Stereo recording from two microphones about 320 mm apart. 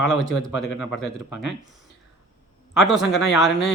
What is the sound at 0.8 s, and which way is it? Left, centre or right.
Speech, centre.